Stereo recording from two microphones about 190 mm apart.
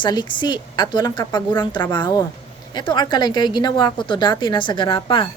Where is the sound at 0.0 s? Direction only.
25° left (ahead or behind).